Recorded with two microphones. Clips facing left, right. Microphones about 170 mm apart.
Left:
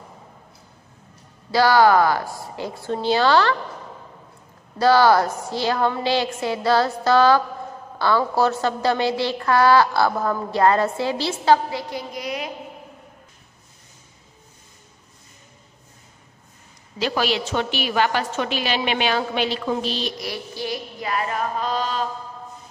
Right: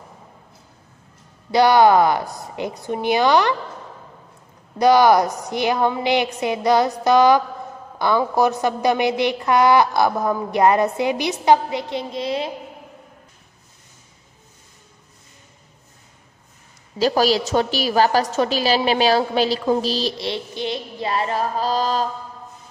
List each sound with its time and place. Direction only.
1.5 s a woman's voice: 20° right (ahead or behind)
4.7 s a woman's voice: 15° right (ahead or behind)
17.0 s a woman's voice: 40° right (ahead or behind)